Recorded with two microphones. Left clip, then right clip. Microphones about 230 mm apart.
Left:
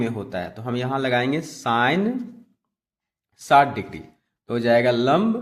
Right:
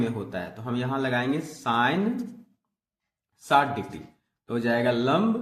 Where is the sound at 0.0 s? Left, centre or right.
Left.